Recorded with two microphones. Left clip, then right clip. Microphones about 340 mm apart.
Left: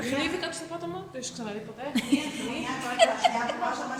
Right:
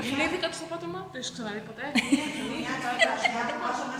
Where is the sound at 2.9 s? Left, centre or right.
Centre.